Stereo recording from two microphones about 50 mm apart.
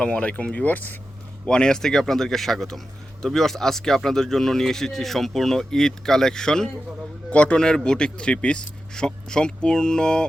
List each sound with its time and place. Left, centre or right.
0.0 s speech: left
1.5 s speech: centre